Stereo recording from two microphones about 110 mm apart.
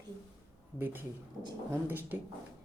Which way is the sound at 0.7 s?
15° right (ahead or behind).